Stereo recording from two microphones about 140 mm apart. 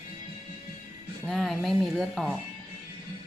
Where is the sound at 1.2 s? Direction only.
Centre (ahead or behind).